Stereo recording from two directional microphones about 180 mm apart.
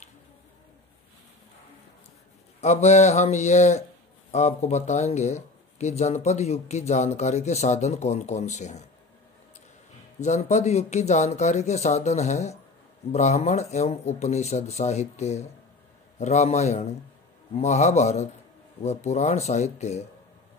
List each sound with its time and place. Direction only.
2.6 s speech: 40° left (ahead or behind)
10.2 s speech: 40° left (ahead or behind)